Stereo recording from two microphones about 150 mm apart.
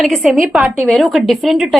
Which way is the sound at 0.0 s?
Centre (ahead or behind).